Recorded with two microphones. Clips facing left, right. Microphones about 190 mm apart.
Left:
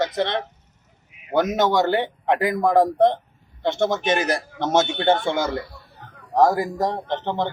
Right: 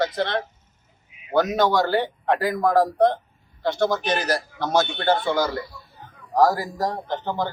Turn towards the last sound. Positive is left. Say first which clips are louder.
# left 2 dB
turn(degrees=25)  # may be behind; listen again after turning